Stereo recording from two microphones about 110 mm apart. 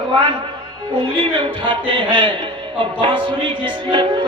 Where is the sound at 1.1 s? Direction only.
50° right (ahead or behind).